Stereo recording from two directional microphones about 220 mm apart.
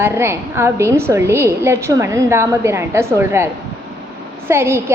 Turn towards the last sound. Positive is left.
turn(degrees=-10)  # may be behind; listen again after turning